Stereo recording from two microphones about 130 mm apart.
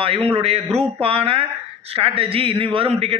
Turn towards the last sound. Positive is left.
turn(degrees=-50)  # may be behind; listen again after turning